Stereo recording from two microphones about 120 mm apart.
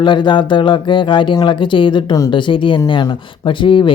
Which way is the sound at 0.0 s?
40° left (ahead or behind).